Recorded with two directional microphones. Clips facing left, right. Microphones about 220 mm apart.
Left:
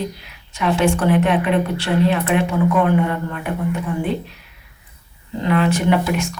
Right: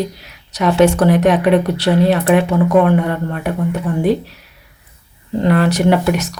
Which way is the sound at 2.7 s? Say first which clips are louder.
Right 3 dB; 50° right (ahead or behind).